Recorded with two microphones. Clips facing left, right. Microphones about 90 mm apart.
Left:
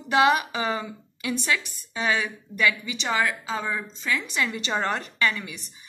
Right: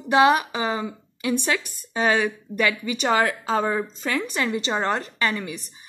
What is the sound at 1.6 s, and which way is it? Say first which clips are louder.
Speech: right 6 dB; 45° right (ahead or behind).